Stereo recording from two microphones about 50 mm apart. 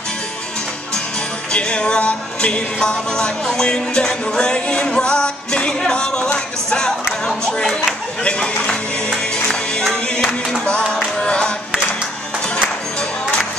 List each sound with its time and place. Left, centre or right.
1.5 s music: centre
8.2 s speech: left
10.6 s music: left